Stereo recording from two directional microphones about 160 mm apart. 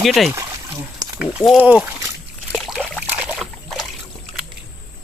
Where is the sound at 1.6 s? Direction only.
10° right (ahead or behind).